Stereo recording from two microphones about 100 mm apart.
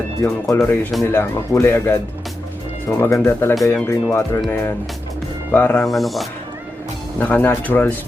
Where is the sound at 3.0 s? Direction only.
25° left (ahead or behind).